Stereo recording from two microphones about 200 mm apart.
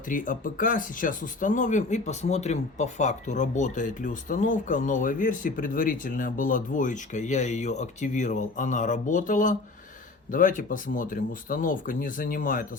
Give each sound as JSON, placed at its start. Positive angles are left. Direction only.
{"t": 0.1, "sound": "speech", "side_deg": 40}